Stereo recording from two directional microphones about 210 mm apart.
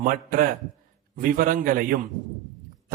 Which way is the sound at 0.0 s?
40° right (ahead or behind).